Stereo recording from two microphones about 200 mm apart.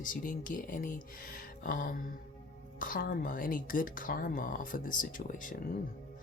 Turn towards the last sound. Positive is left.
turn(degrees=40)  # may be behind; listen again after turning